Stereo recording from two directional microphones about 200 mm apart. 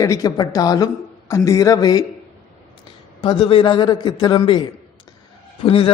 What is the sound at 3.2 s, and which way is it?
A man's voice, 25° left (ahead or behind).